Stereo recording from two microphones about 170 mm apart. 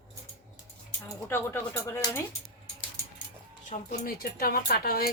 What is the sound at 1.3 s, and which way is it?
Speech, 15° left (ahead or behind).